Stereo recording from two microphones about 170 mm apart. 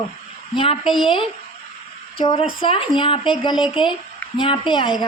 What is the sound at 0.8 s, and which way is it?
Speech, centre (ahead or behind).